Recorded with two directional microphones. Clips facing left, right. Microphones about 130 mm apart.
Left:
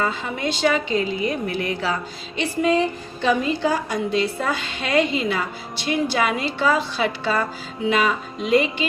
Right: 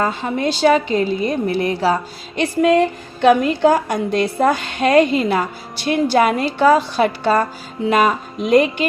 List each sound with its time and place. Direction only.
0.0 s a woman's voice: 40° right (ahead or behind)
2.3 s a woman's voice: 55° right (ahead or behind)